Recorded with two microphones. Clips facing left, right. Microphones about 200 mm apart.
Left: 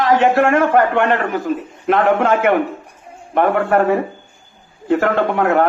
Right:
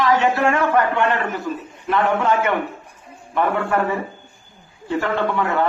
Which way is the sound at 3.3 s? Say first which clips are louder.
Left 5 dB; 50° left (ahead or behind).